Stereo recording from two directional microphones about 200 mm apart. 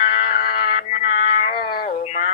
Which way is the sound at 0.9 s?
35° left (ahead or behind).